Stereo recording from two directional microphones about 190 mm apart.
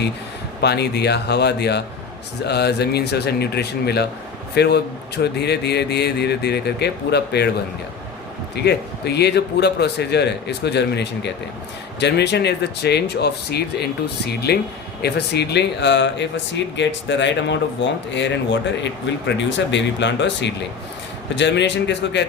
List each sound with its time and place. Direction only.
0.6 s a man's voice: 60° left (ahead or behind)
8.5 s a man's voice: 60° left (ahead or behind)
19.1 s speech: 70° left (ahead or behind)